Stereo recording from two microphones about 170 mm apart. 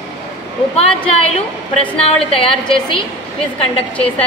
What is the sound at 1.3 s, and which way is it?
A woman's voice, 35° left (ahead or behind).